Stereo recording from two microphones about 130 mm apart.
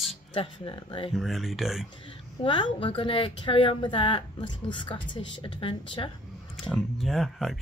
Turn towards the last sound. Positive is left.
turn(degrees=0)  # may be behind; listen again after turning